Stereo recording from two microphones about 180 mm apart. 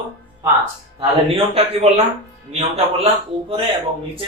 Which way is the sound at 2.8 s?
35° right (ahead or behind).